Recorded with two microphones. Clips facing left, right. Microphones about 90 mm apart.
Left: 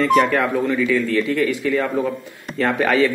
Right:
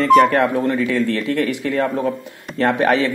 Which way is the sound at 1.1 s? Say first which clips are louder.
Left 1 dB; 30° right (ahead or behind).